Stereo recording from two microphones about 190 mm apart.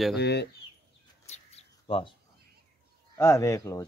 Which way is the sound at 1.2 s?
35° left (ahead or behind).